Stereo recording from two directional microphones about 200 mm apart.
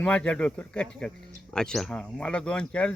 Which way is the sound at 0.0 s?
5° left (ahead or behind).